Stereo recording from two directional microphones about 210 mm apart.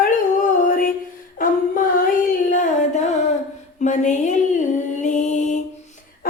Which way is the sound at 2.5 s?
35° left (ahead or behind).